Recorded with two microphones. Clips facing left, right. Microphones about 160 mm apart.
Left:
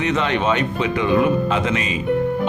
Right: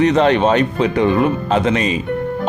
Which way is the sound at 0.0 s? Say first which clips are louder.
Right 7 dB; 35° right (ahead or behind).